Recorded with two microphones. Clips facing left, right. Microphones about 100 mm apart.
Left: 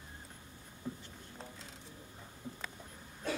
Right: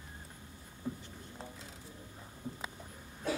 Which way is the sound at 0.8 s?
20° right (ahead or behind).